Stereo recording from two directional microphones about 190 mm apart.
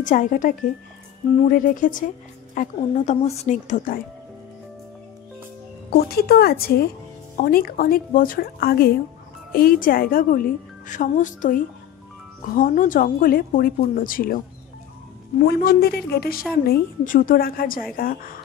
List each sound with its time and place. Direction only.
0.0 s a woman's voice: 40° left (ahead or behind)
5.9 s a woman's voice: 55° left (ahead or behind)
15.4 s a woman's voice: 55° left (ahead or behind)